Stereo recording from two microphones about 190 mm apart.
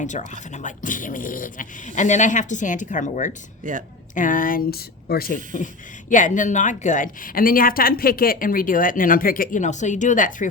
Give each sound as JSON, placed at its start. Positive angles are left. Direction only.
{"t": 0.0, "sound": "speech", "side_deg": 40}
{"t": 3.6, "sound": "speech", "side_deg": -45}
{"t": 4.1, "sound": "a woman's voice", "side_deg": 45}
{"t": 6.1, "sound": "a woman's voice", "side_deg": 40}